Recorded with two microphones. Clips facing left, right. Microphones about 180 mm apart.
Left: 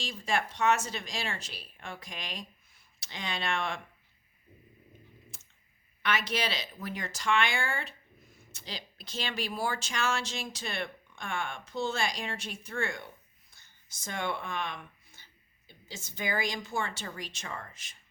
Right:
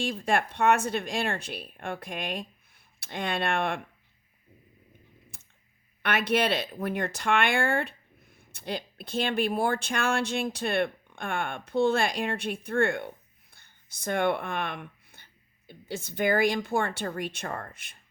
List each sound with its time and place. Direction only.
0.0 s speech: 55° right (ahead or behind)
5.3 s a sound: 60° right (ahead or behind)
6.0 s speech: 60° right (ahead or behind)